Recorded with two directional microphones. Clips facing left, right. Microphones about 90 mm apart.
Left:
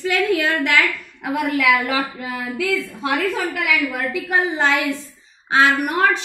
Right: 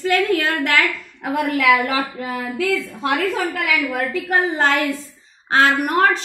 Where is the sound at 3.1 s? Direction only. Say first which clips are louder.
Right 1 dB; 40° right (ahead or behind).